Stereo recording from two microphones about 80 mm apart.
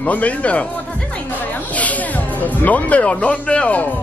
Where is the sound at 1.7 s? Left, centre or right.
Centre.